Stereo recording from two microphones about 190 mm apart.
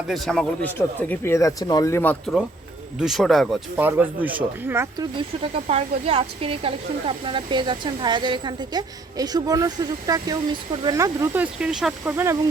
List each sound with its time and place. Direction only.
0.1 s speech: 5° left (ahead or behind)
3.8 s speech: 10° right (ahead or behind)
5.1 s a woman's voice: 30° right (ahead or behind)
11.6 s speech: 5° right (ahead or behind)